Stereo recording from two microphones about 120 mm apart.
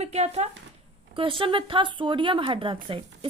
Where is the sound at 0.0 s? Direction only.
65° right (ahead or behind).